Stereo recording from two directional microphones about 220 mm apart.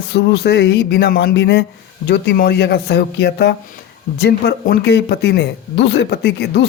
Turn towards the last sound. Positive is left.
turn(degrees=45)  # may be behind; listen again after turning